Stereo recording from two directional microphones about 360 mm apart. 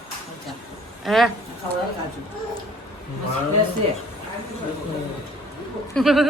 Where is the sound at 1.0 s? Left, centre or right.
Centre.